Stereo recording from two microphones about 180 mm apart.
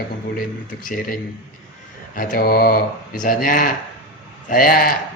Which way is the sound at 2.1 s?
50° left (ahead or behind).